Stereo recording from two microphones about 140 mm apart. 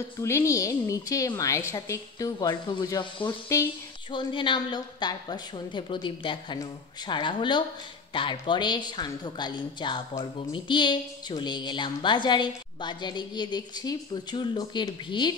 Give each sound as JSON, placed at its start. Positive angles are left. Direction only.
{"t": 0.2, "sound": "a woman's voice", "side_deg": 20}